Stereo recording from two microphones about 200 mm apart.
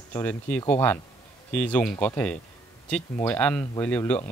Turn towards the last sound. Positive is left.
turn(degrees=10)  # may be behind; listen again after turning